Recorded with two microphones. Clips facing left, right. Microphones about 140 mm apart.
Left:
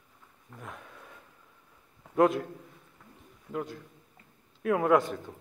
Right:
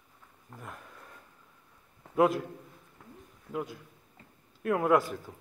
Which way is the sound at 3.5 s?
10° right (ahead or behind).